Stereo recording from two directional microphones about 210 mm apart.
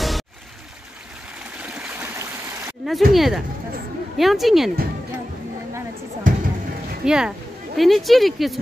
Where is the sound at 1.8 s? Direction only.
10° right (ahead or behind).